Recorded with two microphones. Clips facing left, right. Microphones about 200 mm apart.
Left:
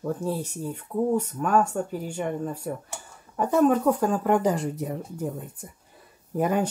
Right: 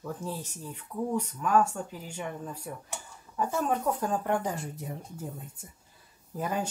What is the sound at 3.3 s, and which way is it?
Speech, 60° left (ahead or behind).